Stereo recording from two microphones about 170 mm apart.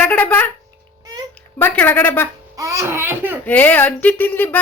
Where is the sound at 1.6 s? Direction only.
10° left (ahead or behind).